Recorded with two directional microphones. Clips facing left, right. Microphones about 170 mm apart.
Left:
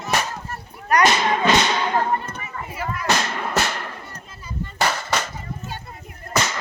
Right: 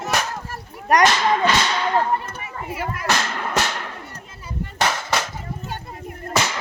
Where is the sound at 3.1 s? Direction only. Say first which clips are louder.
Left 1 dB; centre (ahead or behind).